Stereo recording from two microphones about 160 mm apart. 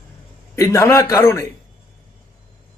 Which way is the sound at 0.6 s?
20° left (ahead or behind).